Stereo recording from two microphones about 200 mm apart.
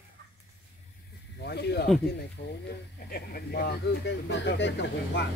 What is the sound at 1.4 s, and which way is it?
Snake, 55° left (ahead or behind).